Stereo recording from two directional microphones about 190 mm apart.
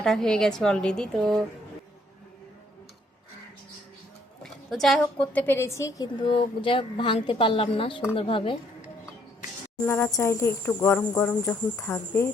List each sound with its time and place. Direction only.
0.0 s a woman's voice: centre (ahead or behind)
4.4 s a woman's voice: centre (ahead or behind); by 8.9 s 30° left (ahead or behind)
9.8 s speech: 10° left (ahead or behind)